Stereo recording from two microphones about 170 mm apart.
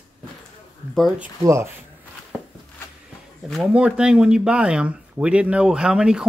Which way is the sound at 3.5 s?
5° right (ahead or behind).